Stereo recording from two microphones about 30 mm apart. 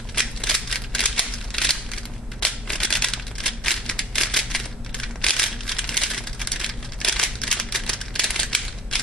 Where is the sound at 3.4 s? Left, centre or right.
Centre.